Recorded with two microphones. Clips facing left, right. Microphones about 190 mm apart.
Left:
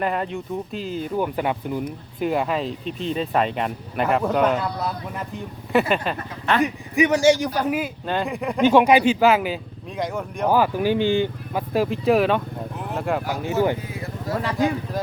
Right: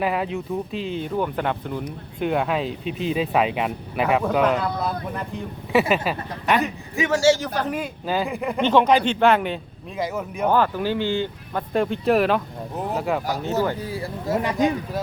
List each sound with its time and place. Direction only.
0.0 s speech: 5° right (ahead or behind)
5.9 s speech: 10° right (ahead or behind)
6.6 s speech: 15° left (ahead or behind)
8.0 s speech: 5° right (ahead or behind)
8.7 s speech: 10° left (ahead or behind)
10.5 s speech: 10° left (ahead or behind)
11.7 s speech: centre (ahead or behind)
13.8 s speech: 30° right (ahead or behind)